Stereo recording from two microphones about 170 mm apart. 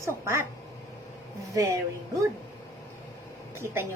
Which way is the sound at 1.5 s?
20° right (ahead or behind).